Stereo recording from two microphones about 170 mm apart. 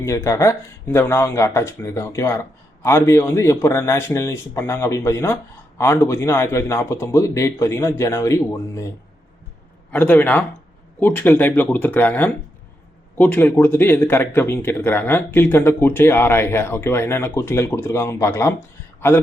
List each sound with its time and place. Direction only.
0.0 s speech: 15° left (ahead or behind)
9.9 s speech: 10° left (ahead or behind)